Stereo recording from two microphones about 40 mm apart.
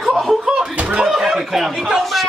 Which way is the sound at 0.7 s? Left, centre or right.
Right.